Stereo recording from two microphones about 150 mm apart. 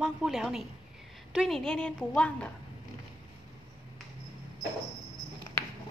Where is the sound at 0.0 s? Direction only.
5° right (ahead or behind).